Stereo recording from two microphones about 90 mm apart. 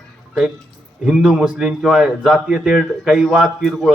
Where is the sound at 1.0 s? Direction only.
5° right (ahead or behind).